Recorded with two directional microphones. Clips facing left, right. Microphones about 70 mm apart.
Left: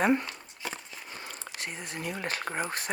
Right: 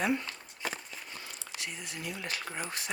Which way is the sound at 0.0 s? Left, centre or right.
Left.